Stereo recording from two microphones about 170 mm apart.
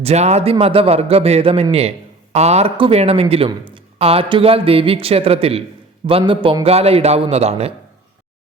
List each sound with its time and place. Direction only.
0.0 s speech: 40° right (ahead or behind)